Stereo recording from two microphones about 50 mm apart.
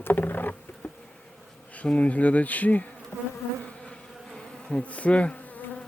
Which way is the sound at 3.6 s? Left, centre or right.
Centre.